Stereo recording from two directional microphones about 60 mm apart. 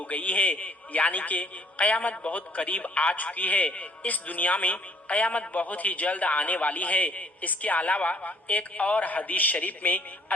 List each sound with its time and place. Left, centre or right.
0.0 s a man's voice: left